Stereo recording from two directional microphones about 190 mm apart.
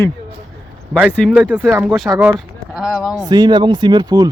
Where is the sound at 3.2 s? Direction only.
20° right (ahead or behind).